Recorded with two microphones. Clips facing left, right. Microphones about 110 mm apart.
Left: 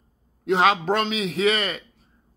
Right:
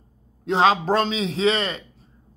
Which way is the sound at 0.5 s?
30° right (ahead or behind).